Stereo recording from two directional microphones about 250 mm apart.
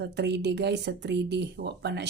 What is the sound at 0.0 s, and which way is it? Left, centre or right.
Speech, right.